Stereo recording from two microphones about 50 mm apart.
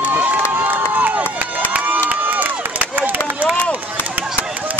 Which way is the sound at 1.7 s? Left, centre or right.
Right.